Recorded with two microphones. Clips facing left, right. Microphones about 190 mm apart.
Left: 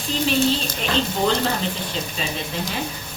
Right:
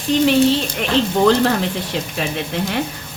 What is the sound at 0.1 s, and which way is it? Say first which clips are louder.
Speech: right 7 dB; 75° right (ahead or behind).